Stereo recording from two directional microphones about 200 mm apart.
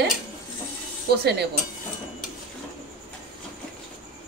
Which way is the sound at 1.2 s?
55° right (ahead or behind).